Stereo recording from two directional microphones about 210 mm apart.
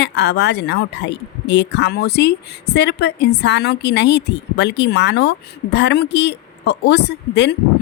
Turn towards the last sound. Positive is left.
turn(degrees=55)  # may be behind; listen again after turning